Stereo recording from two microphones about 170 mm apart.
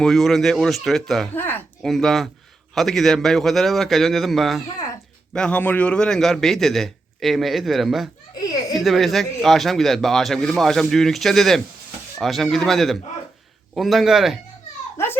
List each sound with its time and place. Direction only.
0.0 s a man's voice: centre (ahead or behind)
1.4 s speech: 10° left (ahead or behind)
1.9 s a man's voice: centre (ahead or behind)
8.4 s a sound: 20° left (ahead or behind)
8.7 s a man's voice: centre (ahead or behind)
14.9 s a child's voice: 15° left (ahead or behind)